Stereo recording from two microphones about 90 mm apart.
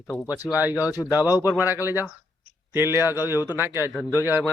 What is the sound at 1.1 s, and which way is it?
Speech, 45° left (ahead or behind).